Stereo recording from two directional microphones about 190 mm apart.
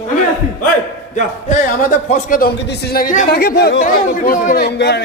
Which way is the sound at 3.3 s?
55° left (ahead or behind).